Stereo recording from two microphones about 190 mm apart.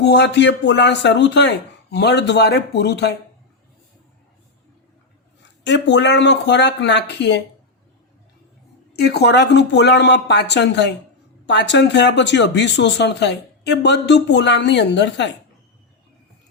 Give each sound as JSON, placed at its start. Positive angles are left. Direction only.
{"t": 0.0, "sound": "speech", "side_deg": 65}
{"t": 5.6, "sound": "speech", "side_deg": 70}
{"t": 9.0, "sound": "speech", "side_deg": 60}